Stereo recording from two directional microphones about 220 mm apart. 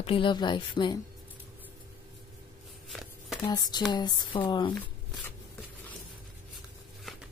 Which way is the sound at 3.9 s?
20° left (ahead or behind).